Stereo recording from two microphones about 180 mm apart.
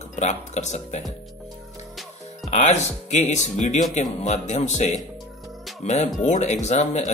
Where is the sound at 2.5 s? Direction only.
40° left (ahead or behind).